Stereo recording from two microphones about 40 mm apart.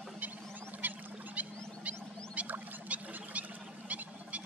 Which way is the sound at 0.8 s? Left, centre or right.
Right.